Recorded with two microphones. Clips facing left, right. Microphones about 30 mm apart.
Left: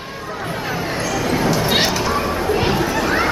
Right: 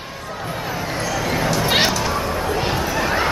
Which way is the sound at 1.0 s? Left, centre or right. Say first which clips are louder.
Left 2 dB; centre.